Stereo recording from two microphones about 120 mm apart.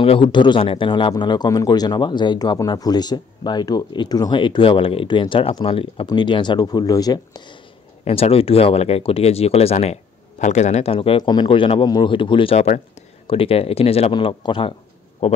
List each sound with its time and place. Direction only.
0.0 s speech: 50° left (ahead or behind); by 7.4 s 30° left (ahead or behind)
8.0 s speech: 55° left (ahead or behind)
10.4 s speech: 75° left (ahead or behind); by 14.1 s 55° left (ahead or behind)
14.1 s speech: 40° left (ahead or behind)
15.2 s speech: 60° left (ahead or behind)